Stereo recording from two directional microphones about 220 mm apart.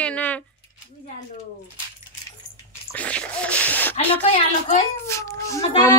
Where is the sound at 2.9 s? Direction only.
5° left (ahead or behind).